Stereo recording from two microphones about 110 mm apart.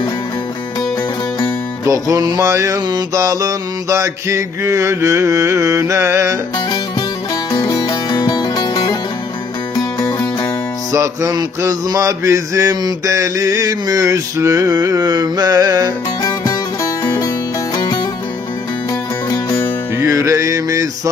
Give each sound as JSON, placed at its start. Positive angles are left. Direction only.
{"t": 1.9, "sound": "mantra", "side_deg": -35}
{"t": 7.5, "sound": "music", "side_deg": 40}
{"t": 10.9, "sound": "music", "side_deg": -30}
{"t": 16.2, "sound": "music", "side_deg": 35}
{"t": 19.3, "sound": "music", "side_deg": 25}
{"t": 20.0, "sound": "male singing", "side_deg": -30}